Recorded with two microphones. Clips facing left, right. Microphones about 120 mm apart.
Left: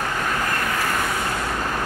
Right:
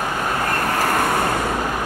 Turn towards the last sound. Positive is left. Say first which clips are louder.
# right 5 dB
turn(degrees=-45)  # may be behind; listen again after turning